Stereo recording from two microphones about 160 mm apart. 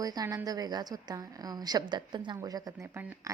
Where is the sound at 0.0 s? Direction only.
25° right (ahead or behind).